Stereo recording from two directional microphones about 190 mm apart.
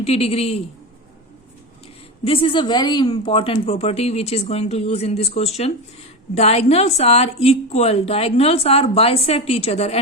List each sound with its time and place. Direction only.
0.0 s a woman's voice: 30° left (ahead or behind)
2.2 s a woman's voice: 30° left (ahead or behind)